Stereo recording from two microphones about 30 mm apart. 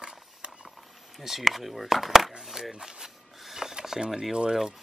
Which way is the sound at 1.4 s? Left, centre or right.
Centre.